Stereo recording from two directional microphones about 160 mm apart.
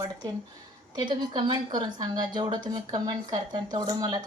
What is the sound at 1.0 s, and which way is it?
A woman's voice, 30° right (ahead or behind).